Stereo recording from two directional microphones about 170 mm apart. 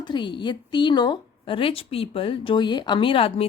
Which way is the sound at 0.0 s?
25° left (ahead or behind).